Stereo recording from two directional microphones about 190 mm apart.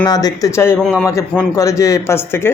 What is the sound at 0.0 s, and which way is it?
Speech, 20° left (ahead or behind).